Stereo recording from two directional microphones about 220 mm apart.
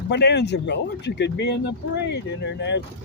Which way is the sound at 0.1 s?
50° left (ahead or behind).